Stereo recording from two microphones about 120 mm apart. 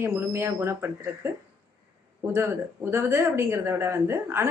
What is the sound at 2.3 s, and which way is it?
Speech, 20° right (ahead or behind).